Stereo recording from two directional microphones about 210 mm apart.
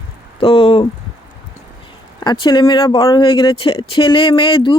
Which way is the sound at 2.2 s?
20° left (ahead or behind).